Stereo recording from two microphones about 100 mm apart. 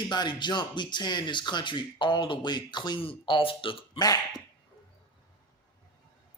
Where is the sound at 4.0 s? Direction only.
40° left (ahead or behind).